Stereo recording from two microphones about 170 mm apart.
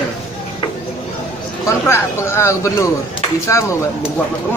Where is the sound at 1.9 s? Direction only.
15° left (ahead or behind).